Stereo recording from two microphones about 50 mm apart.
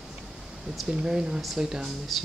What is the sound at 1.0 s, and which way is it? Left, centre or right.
Speech, centre.